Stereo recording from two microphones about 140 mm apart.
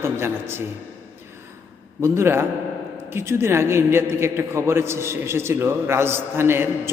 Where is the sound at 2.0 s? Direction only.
20° right (ahead or behind).